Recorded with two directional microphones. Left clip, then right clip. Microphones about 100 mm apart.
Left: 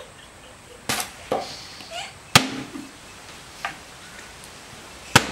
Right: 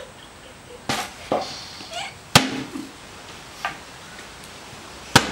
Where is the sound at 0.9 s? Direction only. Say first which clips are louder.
Right 1 dB; 25° left (ahead or behind).